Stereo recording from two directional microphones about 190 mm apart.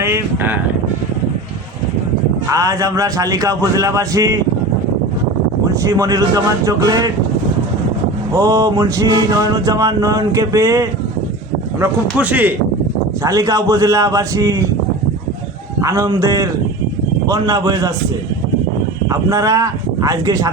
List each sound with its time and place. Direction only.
0.0 s mantra: 15° right (ahead or behind)
2.5 s mantra: 15° right (ahead or behind)
5.8 s mantra: 15° right (ahead or behind)
8.4 s mantra: 15° right (ahead or behind)
15.8 s mantra: 15° right (ahead or behind)
19.0 s speech: 15° right (ahead or behind)